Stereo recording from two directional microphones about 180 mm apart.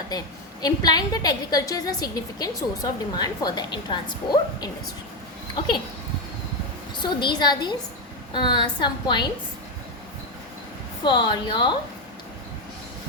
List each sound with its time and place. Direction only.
0.6 s a woman's voice: 20° left (ahead or behind)
6.9 s a woman's voice: 25° left (ahead or behind)
11.0 s a woman's voice: 25° left (ahead or behind)